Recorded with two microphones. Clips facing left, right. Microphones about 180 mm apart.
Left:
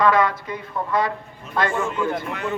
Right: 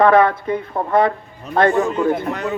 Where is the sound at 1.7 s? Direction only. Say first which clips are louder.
Right 6 dB; 40° right (ahead or behind).